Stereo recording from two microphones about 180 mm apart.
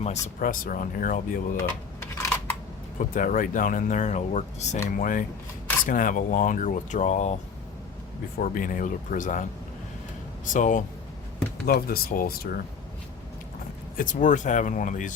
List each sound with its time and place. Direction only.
0.0 s speech: 45° left (ahead or behind)
3.0 s speech: 50° left (ahead or behind)
8.4 s speech: 50° left (ahead or behind)
11.6 s speech: 55° left (ahead or behind)
13.9 s speech: 45° left (ahead or behind)